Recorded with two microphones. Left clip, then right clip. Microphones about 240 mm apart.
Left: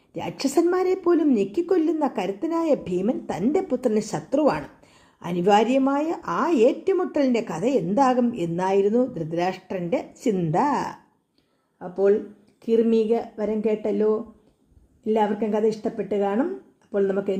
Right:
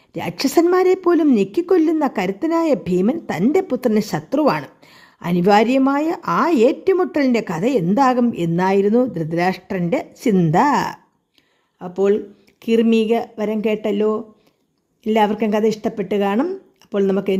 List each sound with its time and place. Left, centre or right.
0.1 s a woman's voice: right